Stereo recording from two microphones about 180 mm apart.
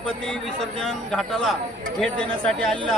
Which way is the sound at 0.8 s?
Centre (ahead or behind).